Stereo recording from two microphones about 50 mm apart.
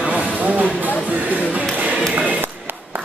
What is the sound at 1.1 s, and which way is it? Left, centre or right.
Speech, right.